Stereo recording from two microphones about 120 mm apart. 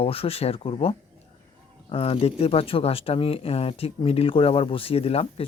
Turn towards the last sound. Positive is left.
turn(degrees=55)  # may be behind; listen again after turning